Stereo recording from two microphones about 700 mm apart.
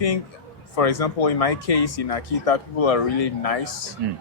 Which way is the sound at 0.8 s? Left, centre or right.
Left.